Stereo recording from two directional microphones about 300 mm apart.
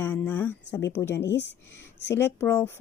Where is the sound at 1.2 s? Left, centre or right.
Left.